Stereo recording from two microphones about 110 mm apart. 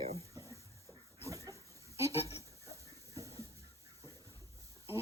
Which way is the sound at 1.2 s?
30° right (ahead or behind).